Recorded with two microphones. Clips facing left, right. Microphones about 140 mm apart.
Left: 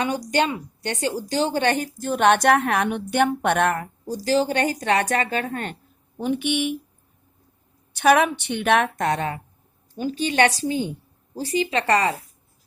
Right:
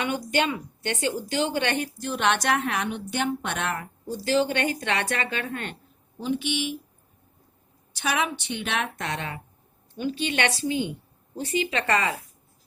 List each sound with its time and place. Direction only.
0.3 s a woman's voice: 35° left (ahead or behind)
6.1 s speech: 55° left (ahead or behind)
7.9 s a woman's voice: 55° left (ahead or behind); by 12.1 s 35° left (ahead or behind)